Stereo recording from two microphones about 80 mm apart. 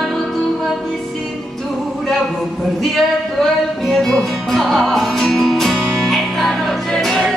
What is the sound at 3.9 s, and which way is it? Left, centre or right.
Music, centre.